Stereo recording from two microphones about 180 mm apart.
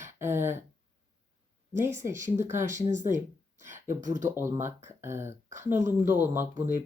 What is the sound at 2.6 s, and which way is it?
Speech, 40° right (ahead or behind).